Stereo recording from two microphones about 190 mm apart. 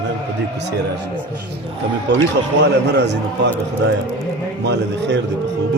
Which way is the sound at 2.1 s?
65° right (ahead or behind).